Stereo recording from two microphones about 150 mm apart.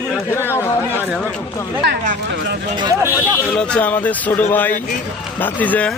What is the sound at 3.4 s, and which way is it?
Speech, 5° left (ahead or behind).